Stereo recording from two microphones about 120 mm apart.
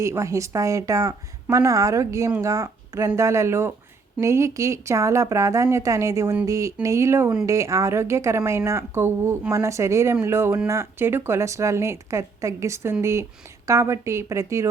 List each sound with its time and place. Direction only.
0.0 s a woman's voice: 25° right (ahead or behind)